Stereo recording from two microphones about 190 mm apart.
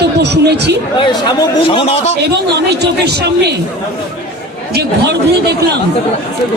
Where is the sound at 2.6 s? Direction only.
60° right (ahead or behind).